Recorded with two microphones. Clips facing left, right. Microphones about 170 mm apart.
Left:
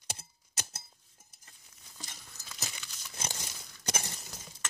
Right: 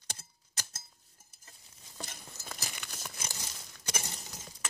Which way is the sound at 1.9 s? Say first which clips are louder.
Right 6 dB; 55° right (ahead or behind).